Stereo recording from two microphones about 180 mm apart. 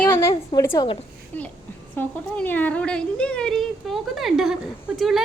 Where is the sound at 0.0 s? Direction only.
15° left (ahead or behind).